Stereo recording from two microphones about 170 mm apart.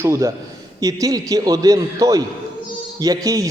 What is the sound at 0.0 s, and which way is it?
A man's voice, 20° right (ahead or behind).